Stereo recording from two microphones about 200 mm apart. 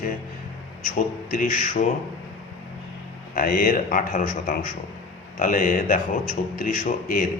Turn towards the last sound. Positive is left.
turn(degrees=40)  # may be behind; listen again after turning